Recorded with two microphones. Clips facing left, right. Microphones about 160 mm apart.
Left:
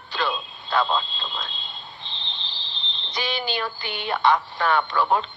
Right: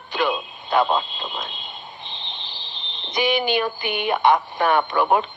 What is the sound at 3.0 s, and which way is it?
Speech, 15° right (ahead or behind).